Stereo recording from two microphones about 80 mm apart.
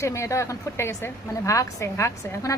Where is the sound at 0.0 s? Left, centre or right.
Left.